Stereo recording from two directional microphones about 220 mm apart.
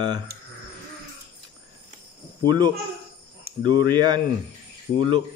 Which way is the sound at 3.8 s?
20° right (ahead or behind).